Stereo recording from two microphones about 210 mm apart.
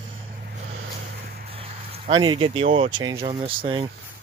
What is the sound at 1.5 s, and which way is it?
Speech, 25° right (ahead or behind).